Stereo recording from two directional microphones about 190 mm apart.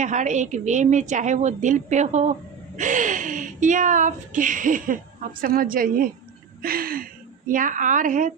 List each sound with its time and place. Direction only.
0.0 s a woman's voice: 40° right (ahead or behind)